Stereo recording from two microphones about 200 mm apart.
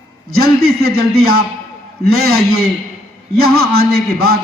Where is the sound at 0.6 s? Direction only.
55° right (ahead or behind).